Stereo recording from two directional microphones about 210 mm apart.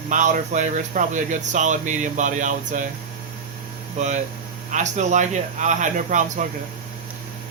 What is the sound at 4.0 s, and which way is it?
Speech, 35° right (ahead or behind).